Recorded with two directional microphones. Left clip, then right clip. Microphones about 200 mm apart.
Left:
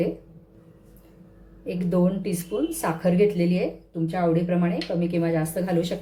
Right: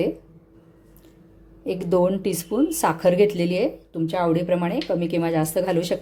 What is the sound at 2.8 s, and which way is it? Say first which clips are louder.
Speech: right 4 dB; 45° right (ahead or behind).